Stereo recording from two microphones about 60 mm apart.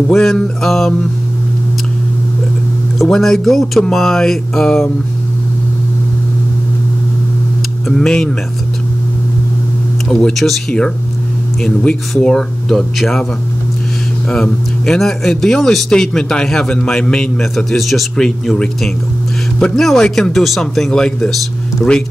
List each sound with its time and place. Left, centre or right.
0.1 s speech: centre
3.0 s speech: centre
7.9 s speech: centre
10.3 s speech: centre
11.6 s speech: centre
14.3 s speech: centre